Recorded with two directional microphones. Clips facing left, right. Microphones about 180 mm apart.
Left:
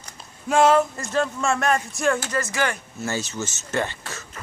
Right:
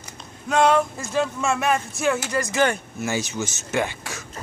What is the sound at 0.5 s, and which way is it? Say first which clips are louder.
Speech: left 1 dB; 5° left (ahead or behind).